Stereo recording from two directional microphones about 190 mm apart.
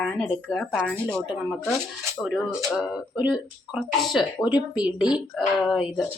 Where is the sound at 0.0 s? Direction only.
Centre (ahead or behind).